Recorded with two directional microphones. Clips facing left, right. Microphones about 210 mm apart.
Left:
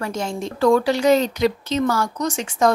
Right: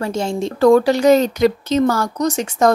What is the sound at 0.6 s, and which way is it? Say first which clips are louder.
Speech: right 5 dB; 40° right (ahead or behind).